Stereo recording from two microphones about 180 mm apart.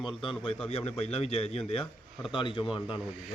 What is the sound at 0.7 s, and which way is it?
A man's voice, 35° left (ahead or behind).